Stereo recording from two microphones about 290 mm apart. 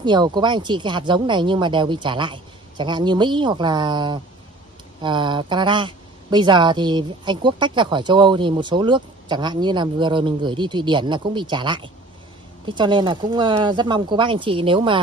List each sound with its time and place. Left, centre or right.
0.0 s speech: centre